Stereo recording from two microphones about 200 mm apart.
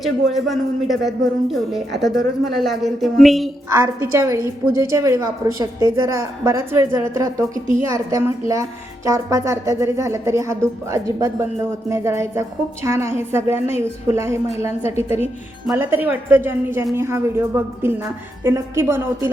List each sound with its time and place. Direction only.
0.0 s a woman's voice: centre (ahead or behind)
3.7 s a woman's voice: 15° right (ahead or behind)
15.7 s a woman's voice: 10° right (ahead or behind)